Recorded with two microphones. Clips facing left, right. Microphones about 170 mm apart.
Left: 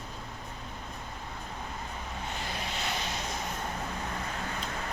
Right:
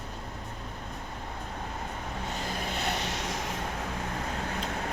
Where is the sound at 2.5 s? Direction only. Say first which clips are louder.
Right 4 dB; 50° right (ahead or behind); by 3.6 s 90° right.